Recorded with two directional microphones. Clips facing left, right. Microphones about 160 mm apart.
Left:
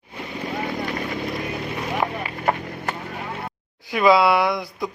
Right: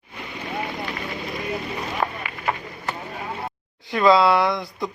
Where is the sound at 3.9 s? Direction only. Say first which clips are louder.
Even; 10° left (ahead or behind).